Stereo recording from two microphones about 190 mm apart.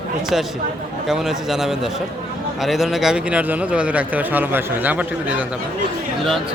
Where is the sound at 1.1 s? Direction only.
Centre (ahead or behind).